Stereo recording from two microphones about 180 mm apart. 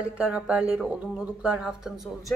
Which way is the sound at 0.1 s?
5° right (ahead or behind).